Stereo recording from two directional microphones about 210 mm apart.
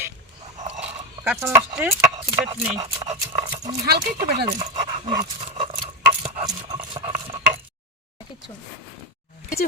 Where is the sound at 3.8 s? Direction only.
50° right (ahead or behind).